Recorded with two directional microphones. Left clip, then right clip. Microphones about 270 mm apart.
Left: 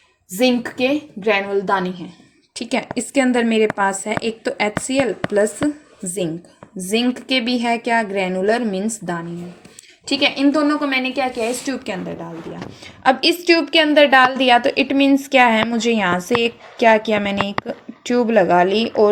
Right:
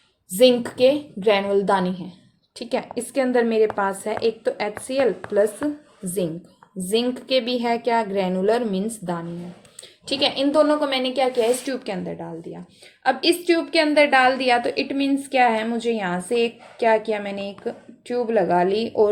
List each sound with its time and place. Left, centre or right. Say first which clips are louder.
0.3 s a woman's voice: right 2 dB; left
2.6 s a woman's voice: left 3 dB; left
6.9 s a woman's voice: left 2 dB; left